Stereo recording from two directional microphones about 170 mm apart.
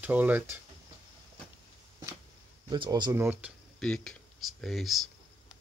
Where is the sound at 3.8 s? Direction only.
5° left (ahead or behind).